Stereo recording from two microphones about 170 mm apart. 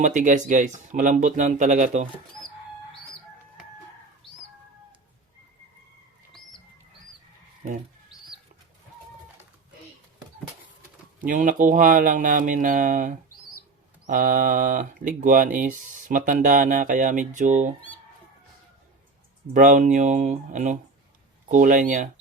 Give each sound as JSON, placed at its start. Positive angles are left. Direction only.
{"t": 0.0, "sound": "speech", "side_deg": -45}
{"t": 11.3, "sound": "speech", "side_deg": -50}
{"t": 19.5, "sound": "speech", "side_deg": -50}